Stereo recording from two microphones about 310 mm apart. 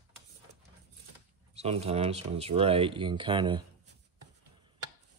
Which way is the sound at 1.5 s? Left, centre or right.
Centre.